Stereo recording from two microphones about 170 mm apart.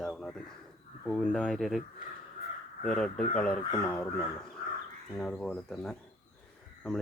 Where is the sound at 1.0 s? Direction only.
5° left (ahead or behind).